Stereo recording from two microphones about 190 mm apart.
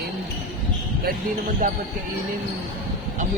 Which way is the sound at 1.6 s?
45° right (ahead or behind).